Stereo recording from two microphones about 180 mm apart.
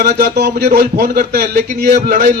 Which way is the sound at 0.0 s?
60° right (ahead or behind).